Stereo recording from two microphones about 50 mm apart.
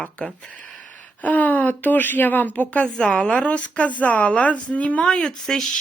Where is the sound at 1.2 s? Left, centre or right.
Left.